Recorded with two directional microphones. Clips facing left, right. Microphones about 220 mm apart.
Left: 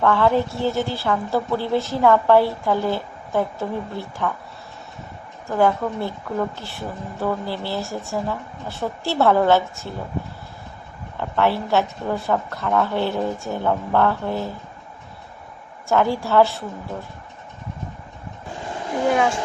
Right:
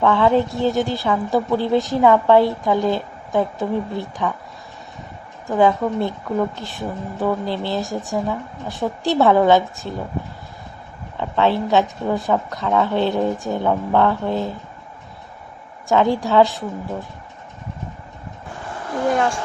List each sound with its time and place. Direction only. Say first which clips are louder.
0.0 s a woman's voice: right 2 dB; 15° right (ahead or behind)
5.5 s a woman's voice: right 3 dB; 15° right (ahead or behind)
11.2 s a woman's voice: right 2 dB; 20° right (ahead or behind)
15.9 s a woman's voice: right 2 dB; 15° right (ahead or behind)
18.6 s a sound: even; 15° left (ahead or behind)